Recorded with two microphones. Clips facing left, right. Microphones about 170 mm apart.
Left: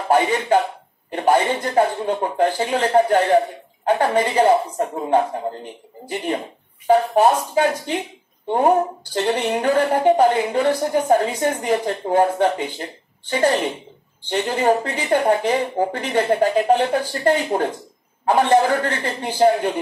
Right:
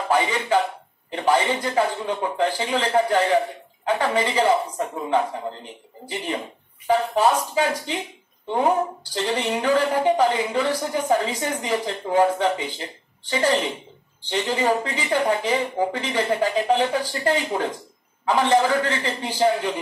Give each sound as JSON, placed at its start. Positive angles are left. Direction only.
{"t": 0.1, "sound": "a woman's voice", "side_deg": 50}
{"t": 6.0, "sound": "a woman's voice", "side_deg": 60}